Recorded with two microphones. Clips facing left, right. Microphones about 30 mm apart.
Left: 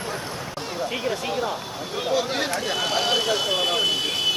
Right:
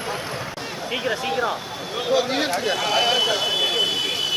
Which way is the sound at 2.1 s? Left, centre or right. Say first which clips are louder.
Right 3 dB; right.